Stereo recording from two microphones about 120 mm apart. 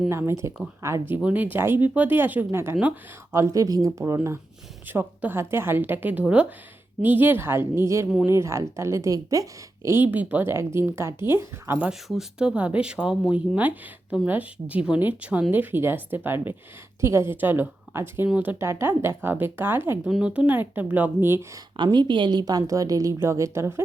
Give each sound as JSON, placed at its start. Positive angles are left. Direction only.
{"t": 0.1, "sound": "speech", "side_deg": -20}
{"t": 11.9, "sound": "speech", "side_deg": -5}
{"t": 18.6, "sound": "speech", "side_deg": -20}
{"t": 20.1, "sound": "speech", "side_deg": -5}
{"t": 21.8, "sound": "speech", "side_deg": -40}